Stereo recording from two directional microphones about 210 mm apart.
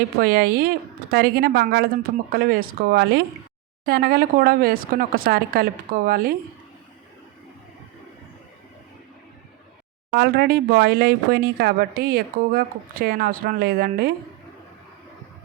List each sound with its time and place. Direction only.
0.2 s speech: 45° right (ahead or behind)
10.1 s speech: 50° right (ahead or behind)